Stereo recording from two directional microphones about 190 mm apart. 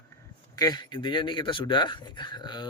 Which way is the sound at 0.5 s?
20° left (ahead or behind).